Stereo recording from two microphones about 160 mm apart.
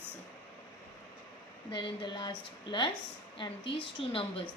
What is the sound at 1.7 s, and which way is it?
A woman's voice, 30° left (ahead or behind).